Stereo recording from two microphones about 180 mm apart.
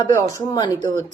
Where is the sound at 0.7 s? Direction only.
40° right (ahead or behind).